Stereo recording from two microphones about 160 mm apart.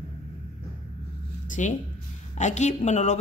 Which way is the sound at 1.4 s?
50° left (ahead or behind).